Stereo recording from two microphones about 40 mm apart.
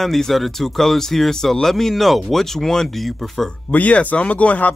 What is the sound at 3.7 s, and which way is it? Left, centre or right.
Speech, left.